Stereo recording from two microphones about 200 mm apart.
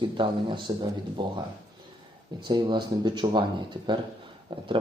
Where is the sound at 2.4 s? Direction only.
20° right (ahead or behind).